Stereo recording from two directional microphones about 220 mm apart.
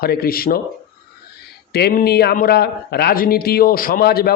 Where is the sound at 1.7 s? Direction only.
45° left (ahead or behind).